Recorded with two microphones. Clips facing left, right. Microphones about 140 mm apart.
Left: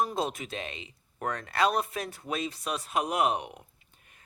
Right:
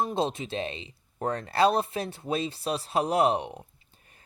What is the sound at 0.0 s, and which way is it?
Speech, 25° right (ahead or behind).